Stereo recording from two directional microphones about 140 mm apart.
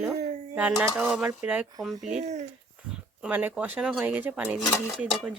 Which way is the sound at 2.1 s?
55° right (ahead or behind).